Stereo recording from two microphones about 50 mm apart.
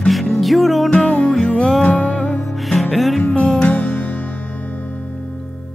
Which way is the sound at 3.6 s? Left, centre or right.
Left.